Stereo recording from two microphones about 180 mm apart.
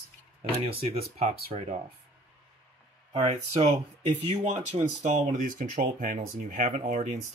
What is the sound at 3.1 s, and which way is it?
Speech, 35° right (ahead or behind).